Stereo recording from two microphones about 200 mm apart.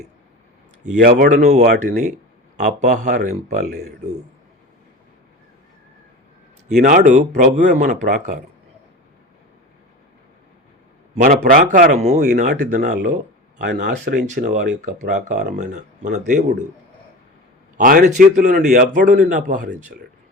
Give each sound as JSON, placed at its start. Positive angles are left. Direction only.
{"t": 0.9, "sound": "a man's voice", "side_deg": -45}
{"t": 6.7, "sound": "a man's voice", "side_deg": -40}
{"t": 11.1, "sound": "a man's voice", "side_deg": -35}
{"t": 13.9, "sound": "speech", "side_deg": -55}
{"t": 14.3, "sound": "a man's voice", "side_deg": -35}
{"t": 17.7, "sound": "a man's voice", "side_deg": -40}